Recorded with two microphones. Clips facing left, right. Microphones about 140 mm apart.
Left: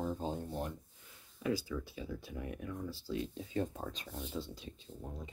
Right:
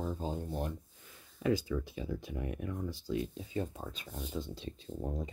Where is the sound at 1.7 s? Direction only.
35° right (ahead or behind).